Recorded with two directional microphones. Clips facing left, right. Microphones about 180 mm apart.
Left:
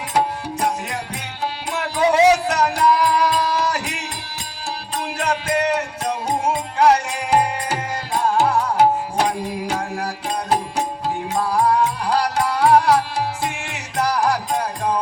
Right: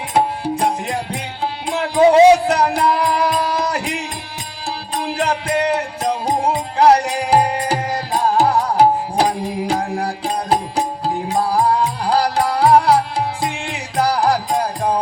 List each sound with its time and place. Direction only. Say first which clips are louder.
0.1 s music: right 3 dB; 30° right (ahead or behind)